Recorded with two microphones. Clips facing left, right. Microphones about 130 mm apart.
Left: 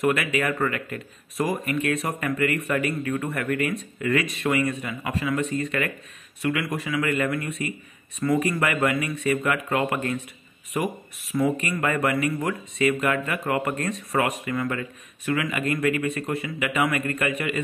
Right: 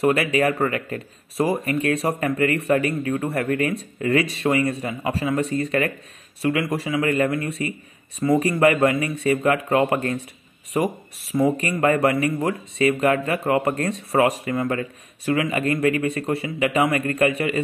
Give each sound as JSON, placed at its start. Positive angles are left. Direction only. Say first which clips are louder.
{"t": 0.0, "sound": "speech", "louder": "right 4 dB", "side_deg": -35}